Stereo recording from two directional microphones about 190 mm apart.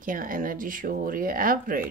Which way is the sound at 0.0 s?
45° right (ahead or behind).